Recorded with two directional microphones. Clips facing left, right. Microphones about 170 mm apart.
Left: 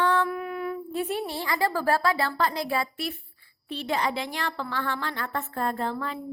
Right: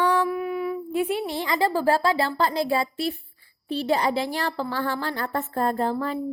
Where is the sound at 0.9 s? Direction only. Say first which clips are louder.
Right 5 dB; 10° right (ahead or behind).